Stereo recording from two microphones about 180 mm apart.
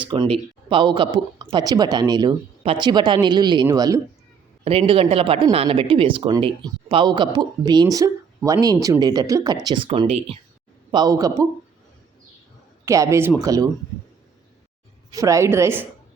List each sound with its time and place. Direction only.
0.0 s speech: 30° right (ahead or behind)
4.9 s speech: 30° right (ahead or behind)
10.9 s speech: 20° right (ahead or behind)
12.8 s speech: 15° right (ahead or behind)
15.1 s speech: 15° right (ahead or behind)